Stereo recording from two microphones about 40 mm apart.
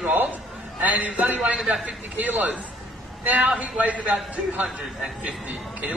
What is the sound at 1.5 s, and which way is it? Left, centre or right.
Speech, centre.